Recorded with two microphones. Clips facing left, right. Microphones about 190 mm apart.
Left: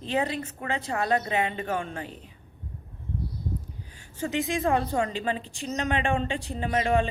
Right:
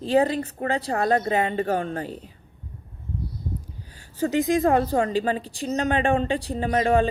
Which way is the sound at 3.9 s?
40° right (ahead or behind).